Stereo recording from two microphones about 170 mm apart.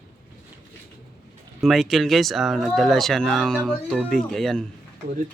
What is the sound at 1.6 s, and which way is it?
Speech, centre (ahead or behind).